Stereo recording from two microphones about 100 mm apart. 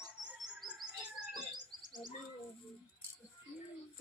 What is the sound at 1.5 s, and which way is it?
Bird, 45° right (ahead or behind).